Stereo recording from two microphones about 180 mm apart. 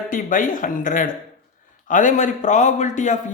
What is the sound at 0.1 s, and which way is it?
Speech, 50° left (ahead or behind).